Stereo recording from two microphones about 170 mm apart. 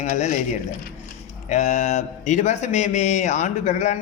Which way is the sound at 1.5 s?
40° left (ahead or behind).